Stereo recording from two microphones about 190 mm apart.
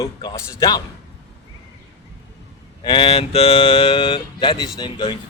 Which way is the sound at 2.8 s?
25° left (ahead or behind).